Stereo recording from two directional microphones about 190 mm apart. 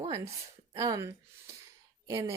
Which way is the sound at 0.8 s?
15° right (ahead or behind).